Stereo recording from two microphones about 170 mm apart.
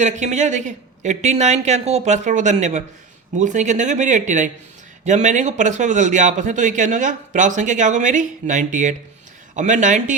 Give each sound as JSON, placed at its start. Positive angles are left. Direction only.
{"t": 0.0, "sound": "a man's voice", "side_deg": -45}